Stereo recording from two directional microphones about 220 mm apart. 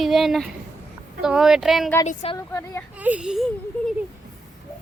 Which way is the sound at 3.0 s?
5° right (ahead or behind).